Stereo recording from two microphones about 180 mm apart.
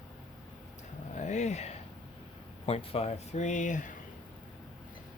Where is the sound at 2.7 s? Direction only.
30° left (ahead or behind).